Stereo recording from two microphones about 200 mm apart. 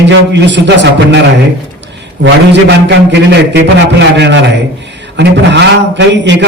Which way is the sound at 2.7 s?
60° right (ahead or behind).